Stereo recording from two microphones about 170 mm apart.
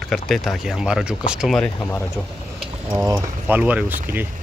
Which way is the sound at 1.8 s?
15° left (ahead or behind).